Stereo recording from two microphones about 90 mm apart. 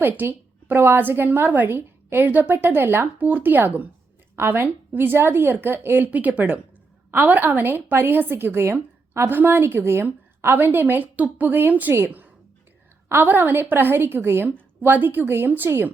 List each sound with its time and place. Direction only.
0.0 s a woman's voice: 25° right (ahead or behind)